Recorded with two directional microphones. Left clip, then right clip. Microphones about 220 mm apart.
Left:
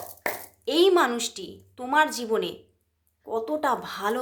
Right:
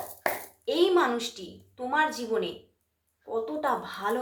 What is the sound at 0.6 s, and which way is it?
A woman's voice, 50° left (ahead or behind).